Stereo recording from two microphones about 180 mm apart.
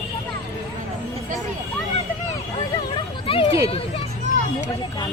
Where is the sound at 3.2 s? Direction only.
30° left (ahead or behind).